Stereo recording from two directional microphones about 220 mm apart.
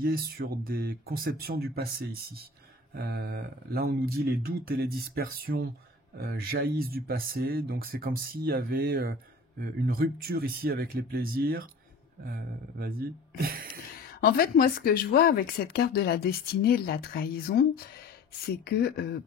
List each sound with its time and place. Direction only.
0.0 s speech: 40° right (ahead or behind)
13.4 s a sound: 40° right (ahead or behind)
14.2 s speech: 40° left (ahead or behind)